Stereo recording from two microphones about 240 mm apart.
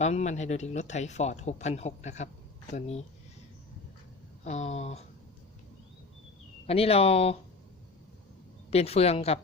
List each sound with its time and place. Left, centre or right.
0.0 s speech: left
4.4 s speech: left
6.7 s speech: left
8.7 s speech: left